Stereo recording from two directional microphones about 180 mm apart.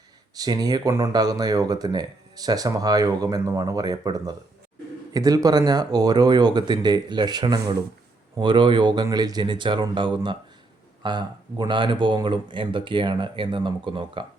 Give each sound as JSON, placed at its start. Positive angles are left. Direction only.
{"t": 0.3, "sound": "speech", "side_deg": -20}